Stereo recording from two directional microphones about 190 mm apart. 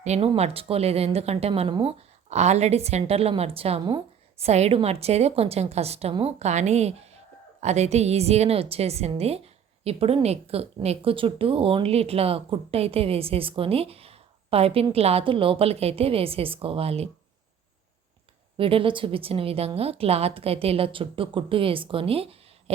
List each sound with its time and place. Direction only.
0.0 s a woman's voice: 35° right (ahead or behind)
18.5 s a woman's voice: 30° right (ahead or behind)